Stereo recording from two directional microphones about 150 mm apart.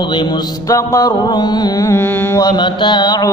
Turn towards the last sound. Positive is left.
turn(degrees=25)  # may be behind; listen again after turning